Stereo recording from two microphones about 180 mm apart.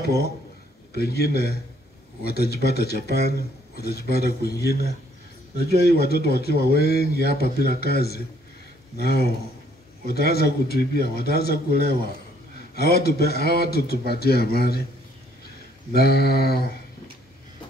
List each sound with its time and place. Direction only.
0.9 s speech: 60° left (ahead or behind)
15.9 s speech: 60° left (ahead or behind)